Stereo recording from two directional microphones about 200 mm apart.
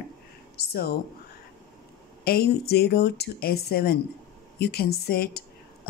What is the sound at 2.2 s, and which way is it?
Speech, 50° left (ahead or behind).